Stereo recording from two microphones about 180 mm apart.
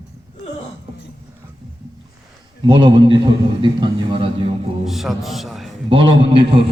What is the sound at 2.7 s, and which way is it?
A man's voice, 25° right (ahead or behind).